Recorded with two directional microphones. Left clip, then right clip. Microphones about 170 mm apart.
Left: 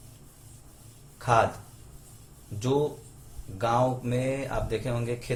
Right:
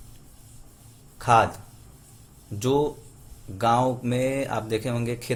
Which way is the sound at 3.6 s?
55° right (ahead or behind).